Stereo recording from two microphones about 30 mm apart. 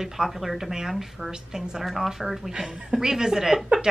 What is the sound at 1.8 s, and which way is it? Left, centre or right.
Speech, centre.